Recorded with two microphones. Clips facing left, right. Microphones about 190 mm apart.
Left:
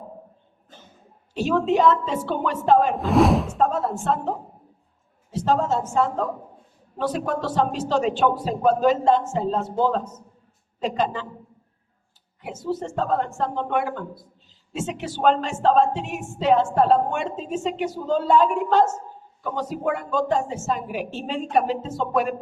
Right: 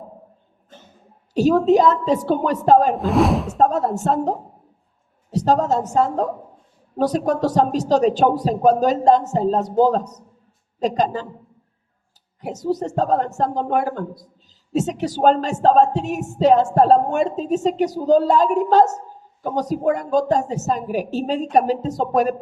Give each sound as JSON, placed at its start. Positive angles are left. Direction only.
{"t": 1.3, "sound": "speech", "side_deg": -40}
{"t": 2.9, "sound": "speech", "side_deg": 0}
{"t": 3.6, "sound": "speech", "side_deg": -40}
{"t": 12.4, "sound": "speech", "side_deg": -40}